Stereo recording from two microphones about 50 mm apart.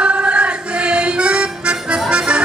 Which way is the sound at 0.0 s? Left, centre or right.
Right.